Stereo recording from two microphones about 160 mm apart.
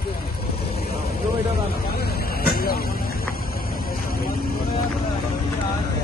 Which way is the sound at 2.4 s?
70° left (ahead or behind).